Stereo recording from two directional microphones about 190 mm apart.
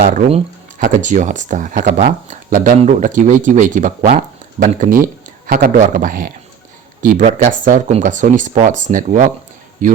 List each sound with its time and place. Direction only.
0.8 s speech: 45° right (ahead or behind)